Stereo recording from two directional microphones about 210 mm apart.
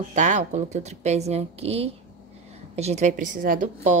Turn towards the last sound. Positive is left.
turn(degrees=-40)  # may be behind; listen again after turning